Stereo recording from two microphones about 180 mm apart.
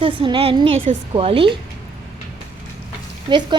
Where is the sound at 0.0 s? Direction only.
30° right (ahead or behind).